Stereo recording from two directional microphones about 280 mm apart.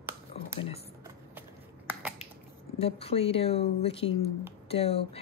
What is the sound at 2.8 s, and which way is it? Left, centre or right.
Speech, left.